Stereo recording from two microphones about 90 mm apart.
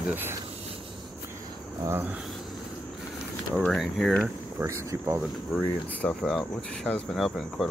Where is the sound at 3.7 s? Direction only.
Centre (ahead or behind).